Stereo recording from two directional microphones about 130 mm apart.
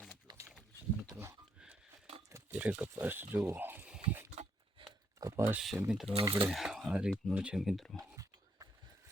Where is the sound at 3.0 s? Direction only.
15° right (ahead or behind).